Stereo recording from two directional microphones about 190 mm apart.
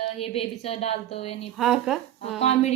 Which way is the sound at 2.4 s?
35° left (ahead or behind).